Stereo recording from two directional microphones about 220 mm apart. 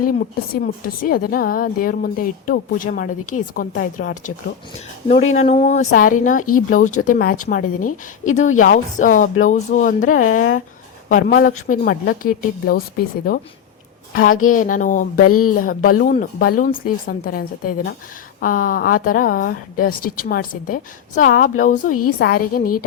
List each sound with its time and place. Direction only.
0.5 s a woman's voice: 40° left (ahead or behind)
15.3 s speech: 90° left
15.5 s a woman's voice: 40° left (ahead or behind)